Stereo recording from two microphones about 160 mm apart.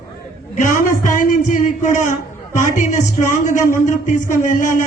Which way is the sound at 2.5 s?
50° left (ahead or behind).